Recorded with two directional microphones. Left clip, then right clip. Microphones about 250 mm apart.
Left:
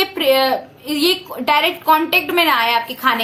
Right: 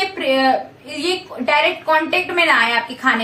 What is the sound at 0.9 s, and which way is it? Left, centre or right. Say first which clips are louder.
A child's voice: left 4 dB; left.